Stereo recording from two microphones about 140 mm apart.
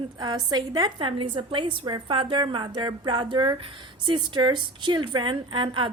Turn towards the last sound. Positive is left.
turn(degrees=-35)  # may be behind; listen again after turning